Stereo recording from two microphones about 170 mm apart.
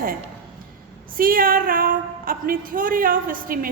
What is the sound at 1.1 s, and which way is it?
A woman's voice, 55° right (ahead or behind).